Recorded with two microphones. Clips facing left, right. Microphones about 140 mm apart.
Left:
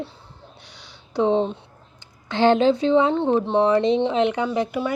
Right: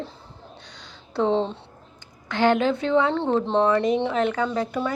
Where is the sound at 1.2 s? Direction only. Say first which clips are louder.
Left 2 dB; 15° left (ahead or behind).